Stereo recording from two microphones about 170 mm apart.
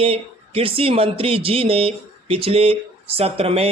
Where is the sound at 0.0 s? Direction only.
35° right (ahead or behind).